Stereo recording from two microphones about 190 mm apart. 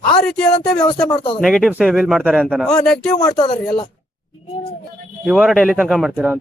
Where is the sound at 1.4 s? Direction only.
Centre (ahead or behind).